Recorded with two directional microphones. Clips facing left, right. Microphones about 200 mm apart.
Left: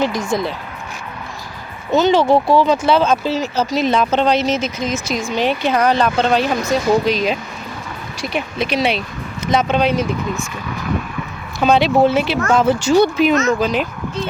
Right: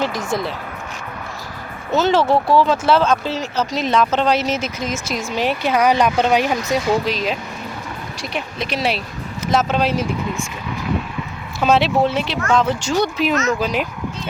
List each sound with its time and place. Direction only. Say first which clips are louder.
0.0 s speech: left 3 dB; 5° right (ahead or behind)
1.9 s speech: left 3 dB; centre (ahead or behind)
7.0 s speech: left 4 dB; centre (ahead or behind)
11.6 s speech: left 3 dB; centre (ahead or behind)
13.3 s speech: left 4 dB; 30° left (ahead or behind)
13.6 s speech: left 3 dB; 10° right (ahead or behind)